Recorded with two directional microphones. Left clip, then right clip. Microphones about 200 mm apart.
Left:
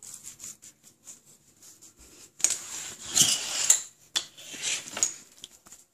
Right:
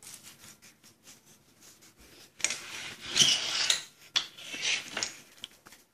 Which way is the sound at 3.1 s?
55° left (ahead or behind).